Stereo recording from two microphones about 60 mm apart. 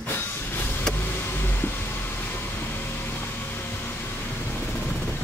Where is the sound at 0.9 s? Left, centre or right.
Centre.